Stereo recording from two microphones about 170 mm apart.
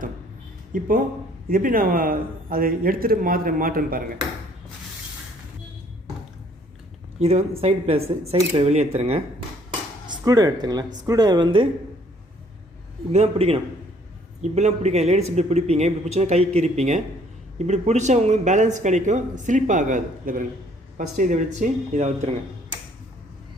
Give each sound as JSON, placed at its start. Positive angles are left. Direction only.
{"t": 0.7, "sound": "a man's voice", "side_deg": -55}
{"t": 7.2, "sound": "speech", "side_deg": -40}
{"t": 10.1, "sound": "speech", "side_deg": -20}
{"t": 13.1, "sound": "speech", "side_deg": -35}